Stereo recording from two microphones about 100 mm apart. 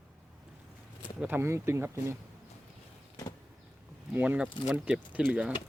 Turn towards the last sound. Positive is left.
turn(degrees=-15)  # may be behind; listen again after turning